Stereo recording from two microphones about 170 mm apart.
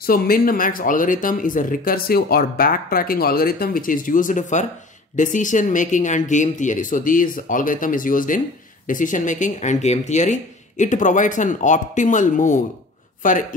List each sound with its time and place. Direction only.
0.0 s speech: 60° left (ahead or behind)